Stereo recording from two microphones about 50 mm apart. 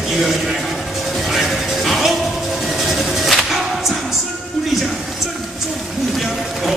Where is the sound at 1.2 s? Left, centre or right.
Centre.